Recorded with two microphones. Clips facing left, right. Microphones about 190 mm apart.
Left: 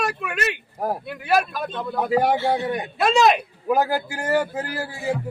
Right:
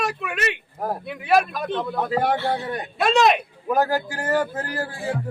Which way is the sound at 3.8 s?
10° left (ahead or behind).